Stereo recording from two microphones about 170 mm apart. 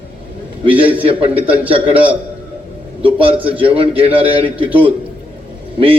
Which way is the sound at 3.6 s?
35° right (ahead or behind).